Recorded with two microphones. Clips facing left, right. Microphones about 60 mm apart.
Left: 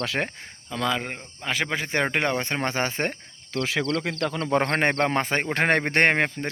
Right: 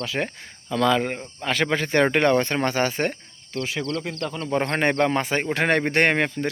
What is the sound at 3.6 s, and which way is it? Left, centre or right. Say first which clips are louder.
Speech: left 2 dB; left.